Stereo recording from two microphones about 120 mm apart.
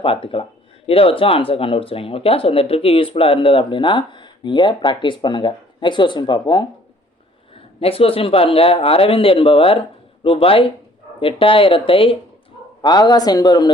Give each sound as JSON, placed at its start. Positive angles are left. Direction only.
{"t": 0.0, "sound": "speech", "side_deg": 50}
{"t": 7.5, "sound": "speech", "side_deg": 50}
{"t": 12.8, "sound": "speech", "side_deg": 35}